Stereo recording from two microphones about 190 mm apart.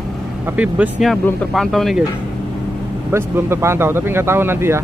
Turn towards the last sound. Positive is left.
turn(degrees=-15)  # may be behind; listen again after turning